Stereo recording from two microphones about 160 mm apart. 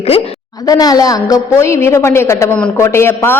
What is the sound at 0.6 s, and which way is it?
A woman's voice, 25° left (ahead or behind).